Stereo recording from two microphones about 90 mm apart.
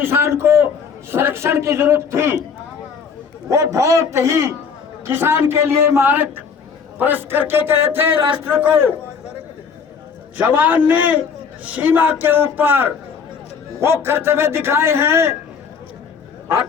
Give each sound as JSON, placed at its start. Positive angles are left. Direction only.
{"t": 0.0, "sound": "a man's voice", "side_deg": -25}
{"t": 3.5, "sound": "a man's voice", "side_deg": -35}
{"t": 7.8, "sound": "speech", "side_deg": -85}
{"t": 10.3, "sound": "a man's voice", "side_deg": -20}